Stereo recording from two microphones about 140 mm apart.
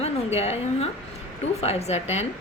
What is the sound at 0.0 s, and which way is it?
A woman's voice, 50° left (ahead or behind).